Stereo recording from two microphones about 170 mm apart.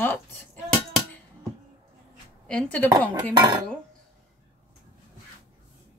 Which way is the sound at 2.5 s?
5° left (ahead or behind).